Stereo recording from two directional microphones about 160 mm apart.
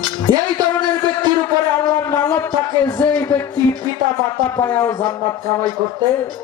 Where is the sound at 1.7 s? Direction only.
15° left (ahead or behind).